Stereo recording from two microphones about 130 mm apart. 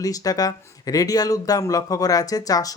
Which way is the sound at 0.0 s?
30° left (ahead or behind).